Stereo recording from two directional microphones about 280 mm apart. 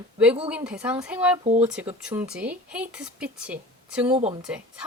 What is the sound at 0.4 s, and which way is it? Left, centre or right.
A woman's voice, centre.